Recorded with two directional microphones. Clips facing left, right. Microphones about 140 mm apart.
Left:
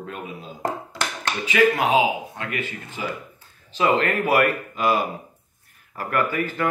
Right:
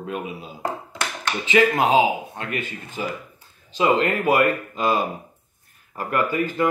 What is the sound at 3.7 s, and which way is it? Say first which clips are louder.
Speech: right 1 dB; 15° right (ahead or behind).